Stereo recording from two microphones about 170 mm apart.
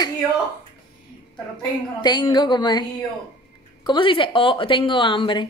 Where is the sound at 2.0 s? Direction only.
25° left (ahead or behind).